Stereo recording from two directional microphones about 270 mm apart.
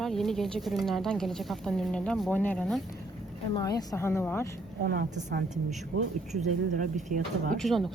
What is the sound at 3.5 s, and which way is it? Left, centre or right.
Speech, centre.